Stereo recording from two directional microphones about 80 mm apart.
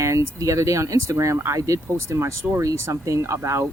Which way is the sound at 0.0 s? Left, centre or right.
Right.